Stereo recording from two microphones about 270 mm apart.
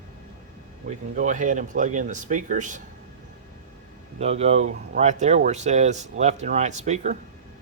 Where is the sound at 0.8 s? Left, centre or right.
Right.